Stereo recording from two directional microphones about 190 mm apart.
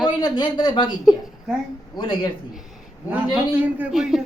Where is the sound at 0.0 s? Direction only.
20° left (ahead or behind).